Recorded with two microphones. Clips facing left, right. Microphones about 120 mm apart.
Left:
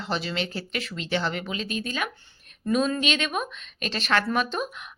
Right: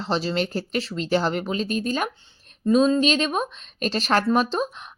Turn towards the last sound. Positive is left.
turn(degrees=-35)  # may be behind; listen again after turning